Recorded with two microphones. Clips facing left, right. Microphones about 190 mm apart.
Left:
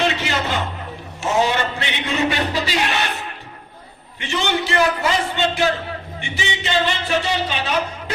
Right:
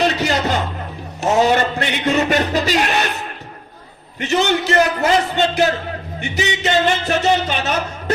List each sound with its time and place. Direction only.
0.0 s music: 40° right (ahead or behind)
1.2 s speech: 40° right (ahead or behind)
4.2 s a man's voice: 40° right (ahead or behind)